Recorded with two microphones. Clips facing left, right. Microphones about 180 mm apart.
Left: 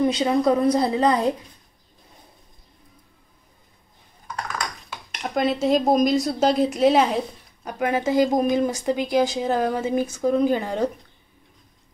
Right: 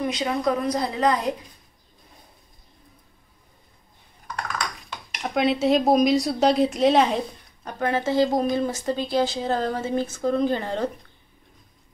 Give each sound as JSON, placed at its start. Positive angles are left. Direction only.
{"t": 0.0, "sound": "a woman's voice", "side_deg": 30}
{"t": 5.2, "sound": "speech", "side_deg": 0}